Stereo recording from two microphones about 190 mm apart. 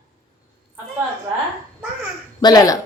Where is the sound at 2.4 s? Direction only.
20° left (ahead or behind).